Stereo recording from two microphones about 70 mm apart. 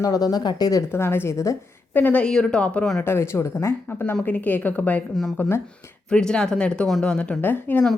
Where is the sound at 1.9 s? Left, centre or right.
Left.